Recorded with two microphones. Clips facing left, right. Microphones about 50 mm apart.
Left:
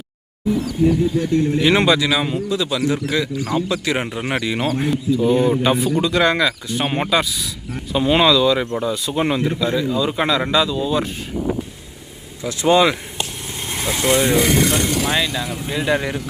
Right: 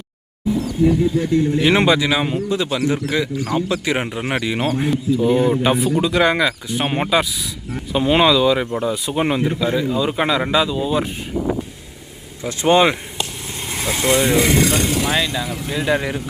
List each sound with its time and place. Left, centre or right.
0.9 s speech: centre
12.4 s speech: right
13.7 s speech: centre
14.6 s speech: centre
15.0 s speech: centre